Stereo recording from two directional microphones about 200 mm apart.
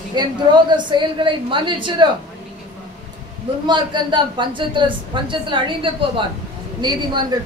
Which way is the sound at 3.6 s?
20° right (ahead or behind).